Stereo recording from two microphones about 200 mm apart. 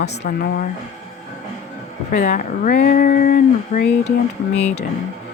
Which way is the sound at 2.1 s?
40° left (ahead or behind).